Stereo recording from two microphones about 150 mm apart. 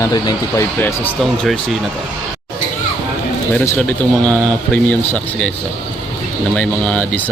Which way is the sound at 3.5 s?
10° left (ahead or behind).